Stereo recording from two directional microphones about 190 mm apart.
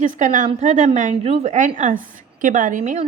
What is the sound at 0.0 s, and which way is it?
A woman's voice, 40° right (ahead or behind).